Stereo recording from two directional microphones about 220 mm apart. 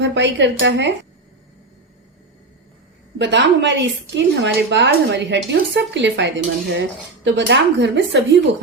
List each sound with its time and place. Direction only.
0.0 s a woman's voice: 55° right (ahead or behind)
3.2 s a woman's voice: 55° right (ahead or behind)